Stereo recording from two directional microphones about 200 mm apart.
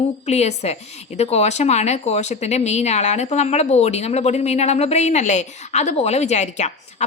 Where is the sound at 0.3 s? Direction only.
35° left (ahead or behind).